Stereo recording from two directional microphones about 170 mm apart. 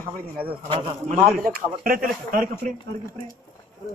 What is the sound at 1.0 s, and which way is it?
A man's voice, 60° right (ahead or behind).